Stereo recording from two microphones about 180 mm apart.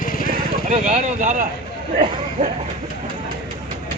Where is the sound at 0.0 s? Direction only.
50° left (ahead or behind).